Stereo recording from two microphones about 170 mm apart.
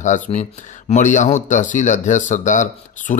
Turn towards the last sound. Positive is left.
turn(degrees=45)  # may be behind; listen again after turning